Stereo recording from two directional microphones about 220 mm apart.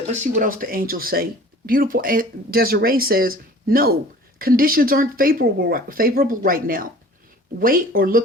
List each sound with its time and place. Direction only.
0.1 s speech: 35° right (ahead or behind)